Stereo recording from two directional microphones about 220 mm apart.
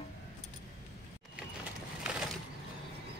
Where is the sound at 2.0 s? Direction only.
Centre (ahead or behind).